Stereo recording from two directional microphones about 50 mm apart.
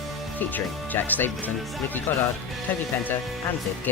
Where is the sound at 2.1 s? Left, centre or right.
Left.